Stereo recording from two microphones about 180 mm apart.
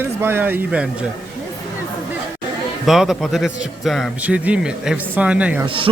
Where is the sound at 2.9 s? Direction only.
Centre (ahead or behind).